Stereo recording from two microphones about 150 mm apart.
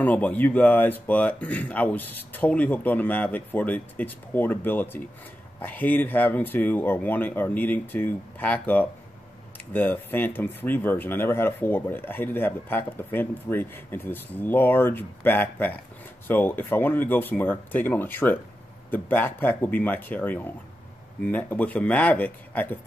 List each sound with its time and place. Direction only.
0.0 s speech: 10° left (ahead or behind)